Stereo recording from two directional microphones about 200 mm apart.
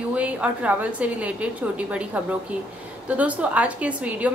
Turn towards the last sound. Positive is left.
turn(degrees=-5)  # may be behind; listen again after turning